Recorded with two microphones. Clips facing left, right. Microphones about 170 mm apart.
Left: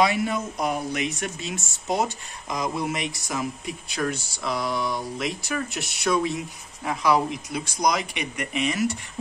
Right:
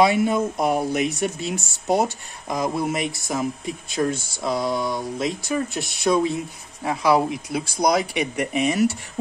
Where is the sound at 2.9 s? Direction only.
40° right (ahead or behind).